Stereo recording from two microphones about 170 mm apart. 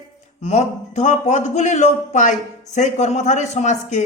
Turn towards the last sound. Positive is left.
turn(degrees=45)  # may be behind; listen again after turning